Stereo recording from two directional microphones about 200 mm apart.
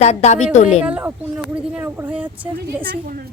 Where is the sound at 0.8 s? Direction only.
5° right (ahead or behind).